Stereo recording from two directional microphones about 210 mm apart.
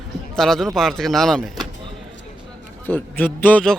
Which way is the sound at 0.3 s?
Centre (ahead or behind).